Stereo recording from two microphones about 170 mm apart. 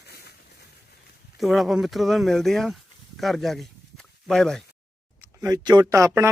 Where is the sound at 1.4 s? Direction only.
Centre (ahead or behind).